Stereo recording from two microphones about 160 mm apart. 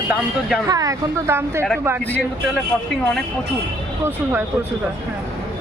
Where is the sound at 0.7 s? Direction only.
20° right (ahead or behind).